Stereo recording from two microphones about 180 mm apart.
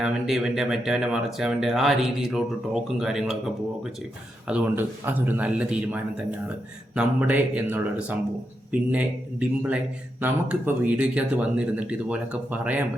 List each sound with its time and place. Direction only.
0.0 s speech: 5° right (ahead or behind)
4.4 s speech: 5° right (ahead or behind)